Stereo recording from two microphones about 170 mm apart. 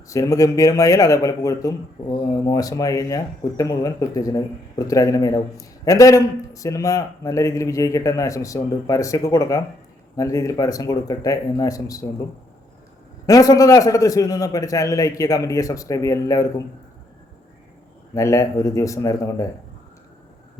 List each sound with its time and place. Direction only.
0.1 s a man's voice: 20° left (ahead or behind)
13.2 s a man's voice: 20° left (ahead or behind)
18.1 s a man's voice: 20° left (ahead or behind)